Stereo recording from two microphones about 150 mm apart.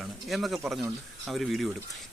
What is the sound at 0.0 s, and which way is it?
Speech, centre (ahead or behind).